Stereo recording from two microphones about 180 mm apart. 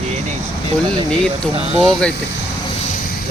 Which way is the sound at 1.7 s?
Centre (ahead or behind).